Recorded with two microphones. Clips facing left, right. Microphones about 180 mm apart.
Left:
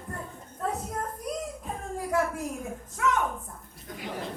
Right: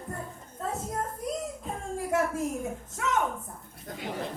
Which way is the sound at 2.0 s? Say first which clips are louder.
Even; 25° right (ahead or behind).